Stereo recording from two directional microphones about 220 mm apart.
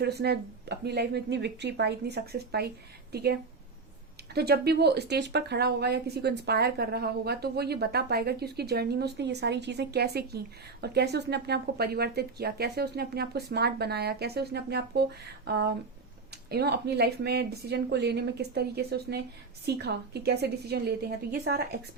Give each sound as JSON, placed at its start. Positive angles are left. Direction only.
{"t": 0.0, "sound": "a woman's voice", "side_deg": -45}
{"t": 4.4, "sound": "a woman's voice", "side_deg": -45}